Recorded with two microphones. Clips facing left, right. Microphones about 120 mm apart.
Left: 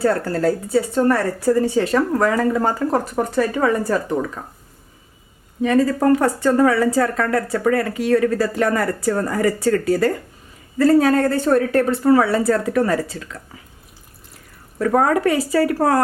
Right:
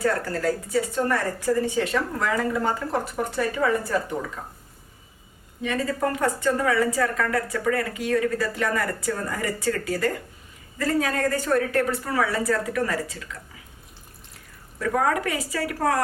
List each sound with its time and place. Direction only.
0.0 s a woman's voice: 30° left (ahead or behind)
5.6 s a woman's voice: 35° left (ahead or behind)
14.8 s a woman's voice: 40° left (ahead or behind)